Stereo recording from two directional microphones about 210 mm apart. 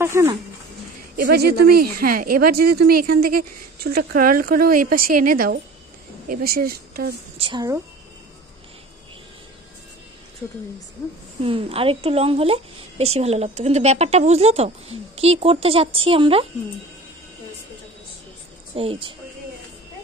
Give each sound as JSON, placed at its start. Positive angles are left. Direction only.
{"t": 0.0, "sound": "speech", "side_deg": -15}
{"t": 1.1, "sound": "speech", "side_deg": -50}
{"t": 7.3, "sound": "a woman's voice", "side_deg": -25}
{"t": 11.4, "sound": "a woman's voice", "side_deg": -25}
{"t": 18.8, "sound": "a woman's voice", "side_deg": -25}